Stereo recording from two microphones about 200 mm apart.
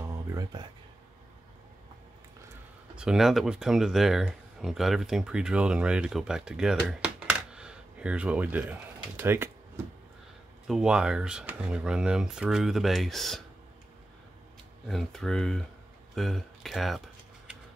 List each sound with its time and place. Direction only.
0.0 s a sound: 20° right (ahead or behind)
3.0 s speech: centre (ahead or behind)
10.7 s speech: 5° right (ahead or behind)
14.9 s speech: centre (ahead or behind)